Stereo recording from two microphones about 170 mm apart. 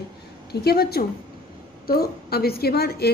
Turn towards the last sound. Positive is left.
turn(degrees=65)  # may be behind; listen again after turning